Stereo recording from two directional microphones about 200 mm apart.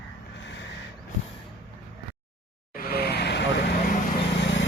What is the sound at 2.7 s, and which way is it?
Vehicle, 50° left (ahead or behind).